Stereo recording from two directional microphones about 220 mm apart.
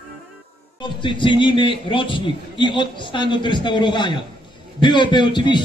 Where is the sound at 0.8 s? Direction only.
20° left (ahead or behind).